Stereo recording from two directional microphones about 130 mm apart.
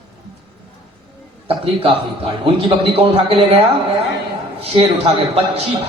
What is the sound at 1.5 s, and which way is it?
A man's voice, 45° right (ahead or behind).